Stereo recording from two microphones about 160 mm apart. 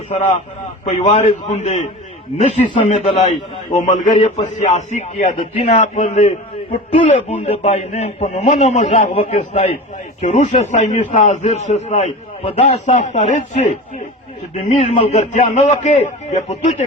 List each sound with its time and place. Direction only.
0.1 s a man's voice: 45° left (ahead or behind)